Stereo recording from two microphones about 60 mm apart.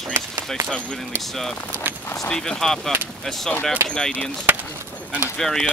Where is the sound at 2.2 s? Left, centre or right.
Centre.